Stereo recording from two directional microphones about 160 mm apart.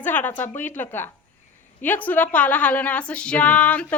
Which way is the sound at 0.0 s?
10° left (ahead or behind).